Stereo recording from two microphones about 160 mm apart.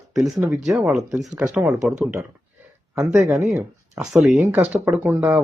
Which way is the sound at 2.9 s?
15° right (ahead or behind).